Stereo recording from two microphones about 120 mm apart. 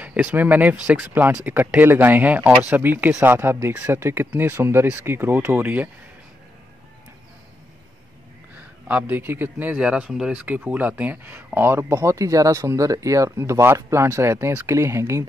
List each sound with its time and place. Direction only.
0.0 s a man's voice: 10° right (ahead or behind)
8.5 s a man's voice: 15° right (ahead or behind)